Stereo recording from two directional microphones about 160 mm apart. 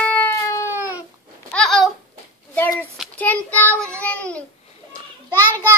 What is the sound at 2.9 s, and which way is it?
Child singing, 5° left (ahead or behind).